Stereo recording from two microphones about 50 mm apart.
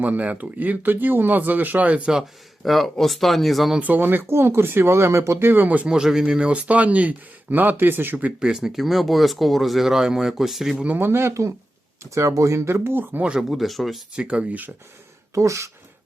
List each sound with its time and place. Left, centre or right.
0.0 s speech: right
2.6 s speech: centre
3.8 s speech: right
5.4 s speech: right
5.9 s speech: centre; by 8.3 s right
8.4 s speech: centre
11.0 s speech: right
12.1 s speech: right
13.5 s speech: centre
14.2 s speech: right
15.4 s speech: right